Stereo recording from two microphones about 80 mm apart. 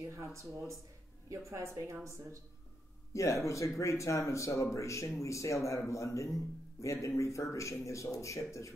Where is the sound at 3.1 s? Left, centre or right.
Left.